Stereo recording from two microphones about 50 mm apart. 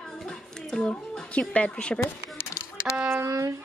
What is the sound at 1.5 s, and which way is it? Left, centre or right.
Speech, left.